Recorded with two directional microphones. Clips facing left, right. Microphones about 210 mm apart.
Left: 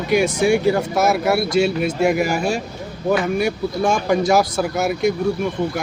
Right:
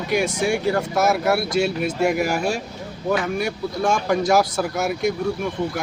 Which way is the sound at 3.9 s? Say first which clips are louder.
Left 2 dB; centre (ahead or behind).